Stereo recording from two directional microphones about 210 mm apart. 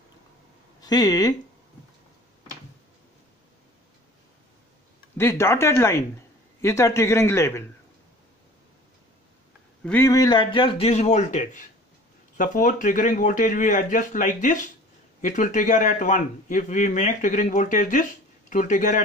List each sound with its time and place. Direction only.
0.7 s speech: 20° left (ahead or behind)
5.1 s a man's voice: 10° left (ahead or behind)
9.8 s a man's voice: 10° left (ahead or behind); by 19.0 s 35° left (ahead or behind)